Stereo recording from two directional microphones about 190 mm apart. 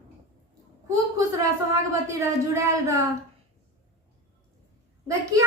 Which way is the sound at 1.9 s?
15° right (ahead or behind).